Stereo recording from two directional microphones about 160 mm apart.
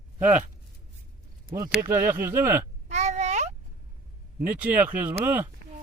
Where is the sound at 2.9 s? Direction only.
45° right (ahead or behind).